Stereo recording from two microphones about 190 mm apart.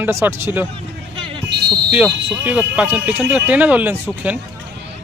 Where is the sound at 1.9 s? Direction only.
10° right (ahead or behind).